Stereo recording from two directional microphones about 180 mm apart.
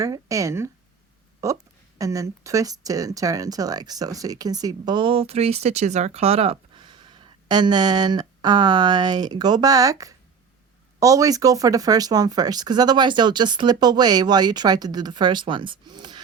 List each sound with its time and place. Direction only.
0.0 s speech: 20° right (ahead or behind)